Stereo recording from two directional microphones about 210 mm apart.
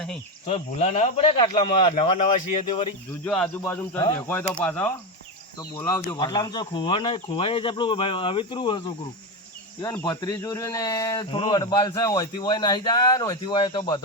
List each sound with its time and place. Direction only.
0.5 s speech: 30° left (ahead or behind)
3.2 s speech: 5° left (ahead or behind); by 8.9 s 20° left (ahead or behind)
10.0 s speech: 20° left (ahead or behind)